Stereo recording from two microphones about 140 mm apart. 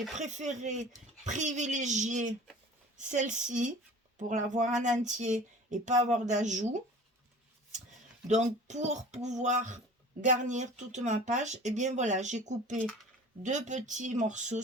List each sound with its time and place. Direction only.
0.2 s speech: 60° right (ahead or behind)
8.3 s speech: 55° right (ahead or behind)